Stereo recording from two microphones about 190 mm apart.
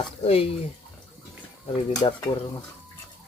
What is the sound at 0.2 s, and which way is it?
Speech, 30° left (ahead or behind).